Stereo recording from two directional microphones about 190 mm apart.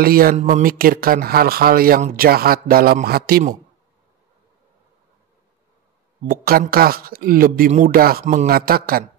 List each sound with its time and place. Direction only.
0.0 s speech: 50° right (ahead or behind)
6.2 s speech: 50° right (ahead or behind)